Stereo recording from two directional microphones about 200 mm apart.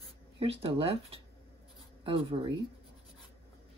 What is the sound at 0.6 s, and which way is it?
Speech, 30° right (ahead or behind).